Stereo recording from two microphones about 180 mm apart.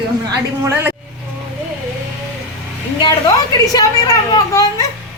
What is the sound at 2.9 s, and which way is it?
A woman's voice, 20° left (ahead or behind).